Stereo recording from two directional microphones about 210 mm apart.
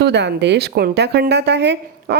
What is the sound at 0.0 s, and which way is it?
Speech, 55° right (ahead or behind).